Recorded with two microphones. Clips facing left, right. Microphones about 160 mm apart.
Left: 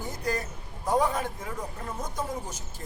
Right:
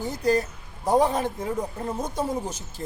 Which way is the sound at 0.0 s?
30° right (ahead or behind).